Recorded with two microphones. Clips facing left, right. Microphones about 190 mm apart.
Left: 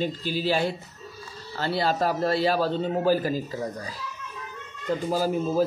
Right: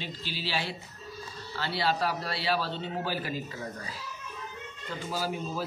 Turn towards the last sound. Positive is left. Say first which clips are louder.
# left 9 dB
turn(degrees=45)  # may be behind; listen again after turning